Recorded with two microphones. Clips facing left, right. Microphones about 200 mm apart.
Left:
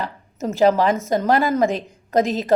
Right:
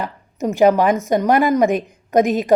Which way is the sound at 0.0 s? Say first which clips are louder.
Right 3 dB; 15° right (ahead or behind).